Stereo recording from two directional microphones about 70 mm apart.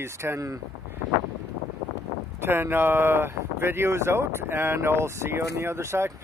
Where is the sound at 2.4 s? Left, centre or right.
Right.